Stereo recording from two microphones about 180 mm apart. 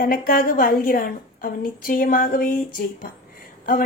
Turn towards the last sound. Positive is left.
turn(degrees=50)  # may be behind; listen again after turning